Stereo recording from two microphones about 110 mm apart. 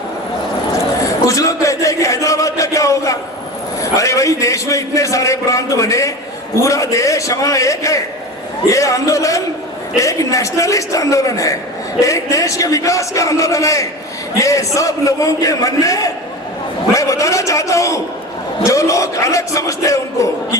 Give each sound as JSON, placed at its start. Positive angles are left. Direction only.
{"t": 1.3, "sound": "chant", "side_deg": 30}
{"t": 3.8, "sound": "a man's voice", "side_deg": 30}